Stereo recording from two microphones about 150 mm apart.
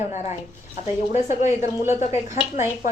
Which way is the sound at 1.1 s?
55° left (ahead or behind).